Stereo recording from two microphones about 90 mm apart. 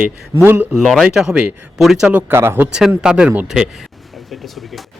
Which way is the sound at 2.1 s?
25° right (ahead or behind).